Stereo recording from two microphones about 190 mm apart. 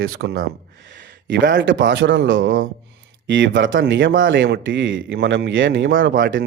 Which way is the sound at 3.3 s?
70° right (ahead or behind).